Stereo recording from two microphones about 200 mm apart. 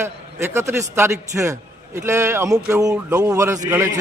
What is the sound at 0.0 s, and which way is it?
A man's voice, 15° right (ahead or behind).